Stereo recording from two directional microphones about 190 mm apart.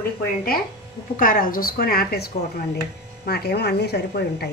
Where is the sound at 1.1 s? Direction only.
45° left (ahead or behind).